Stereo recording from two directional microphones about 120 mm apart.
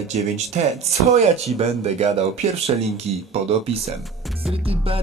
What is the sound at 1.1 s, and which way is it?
Speech, 65° right (ahead or behind).